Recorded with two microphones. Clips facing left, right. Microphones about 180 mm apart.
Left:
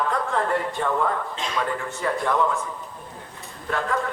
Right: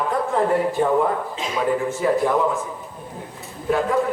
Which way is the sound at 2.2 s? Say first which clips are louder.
Right 3 dB; 20° right (ahead or behind).